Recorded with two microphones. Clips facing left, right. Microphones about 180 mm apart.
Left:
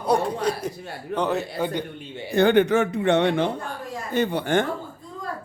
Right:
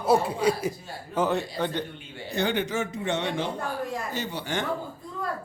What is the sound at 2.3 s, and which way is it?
A man's voice, 55° left (ahead or behind).